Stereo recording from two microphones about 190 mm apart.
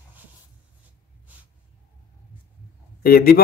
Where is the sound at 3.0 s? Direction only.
50° left (ahead or behind).